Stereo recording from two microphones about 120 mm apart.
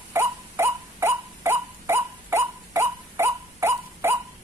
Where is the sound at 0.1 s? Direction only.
25° right (ahead or behind).